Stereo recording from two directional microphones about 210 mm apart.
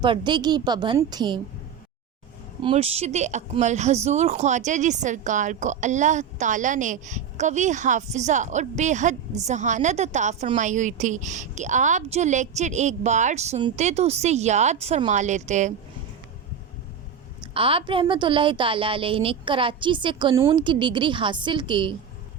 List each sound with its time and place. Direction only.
0.0 s a woman's voice: 20° right (ahead or behind)
2.6 s speech: 30° right (ahead or behind)
17.4 s a woman's voice: 25° right (ahead or behind)